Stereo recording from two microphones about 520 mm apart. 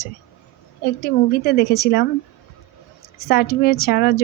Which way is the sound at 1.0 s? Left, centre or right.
Centre.